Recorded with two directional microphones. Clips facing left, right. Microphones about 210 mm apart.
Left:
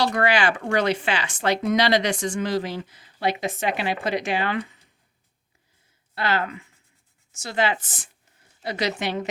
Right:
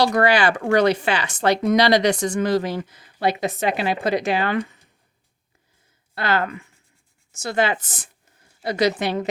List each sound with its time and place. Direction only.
0.0 s speech: 40° right (ahead or behind)
6.1 s speech: 50° right (ahead or behind)